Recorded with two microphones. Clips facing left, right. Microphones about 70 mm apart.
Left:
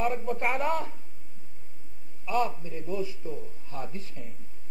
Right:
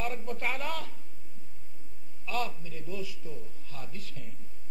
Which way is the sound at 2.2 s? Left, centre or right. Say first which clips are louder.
Left 6 dB; left.